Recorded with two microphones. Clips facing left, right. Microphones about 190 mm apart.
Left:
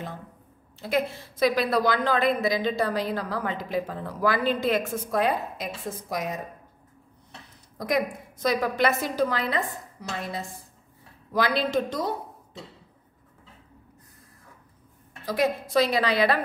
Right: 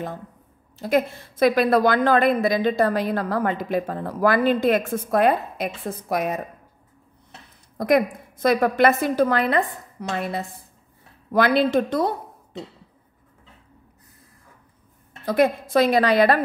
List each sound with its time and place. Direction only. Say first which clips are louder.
0.7 s a woman's voice: right 5 dB; 45° right (ahead or behind); by 6.4 s 60° right (ahead or behind)
7.7 s a woman's voice: right 7 dB; 55° right (ahead or behind)
15.2 s a woman's voice: right 6 dB; 55° right (ahead or behind)